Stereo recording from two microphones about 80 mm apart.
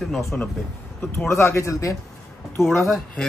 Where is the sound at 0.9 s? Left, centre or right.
Left.